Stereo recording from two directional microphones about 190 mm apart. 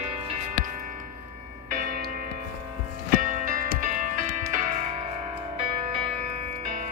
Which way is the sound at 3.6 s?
40° right (ahead or behind).